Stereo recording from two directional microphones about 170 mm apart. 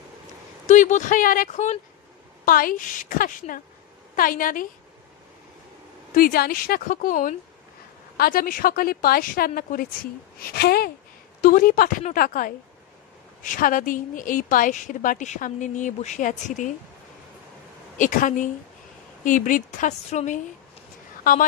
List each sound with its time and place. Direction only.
0.7 s a woman's voice: 45° left (ahead or behind)
2.4 s a woman's voice: 55° left (ahead or behind)
6.1 s a woman's voice: 60° left (ahead or behind)
10.5 s speech: 65° left (ahead or behind)
11.4 s a woman's voice: 55° left (ahead or behind)
17.9 s a woman's voice: 50° left (ahead or behind)
21.2 s speech: 55° left (ahead or behind)